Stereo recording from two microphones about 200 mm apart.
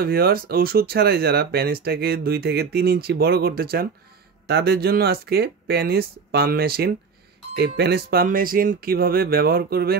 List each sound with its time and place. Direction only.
0.0 s speech: 50° right (ahead or behind)